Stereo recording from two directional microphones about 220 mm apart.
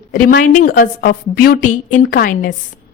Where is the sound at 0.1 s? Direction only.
40° left (ahead or behind).